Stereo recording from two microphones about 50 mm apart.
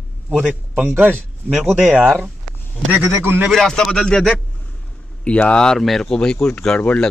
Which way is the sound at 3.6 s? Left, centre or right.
Centre.